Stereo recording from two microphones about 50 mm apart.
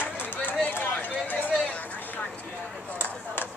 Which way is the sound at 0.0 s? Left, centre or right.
Left.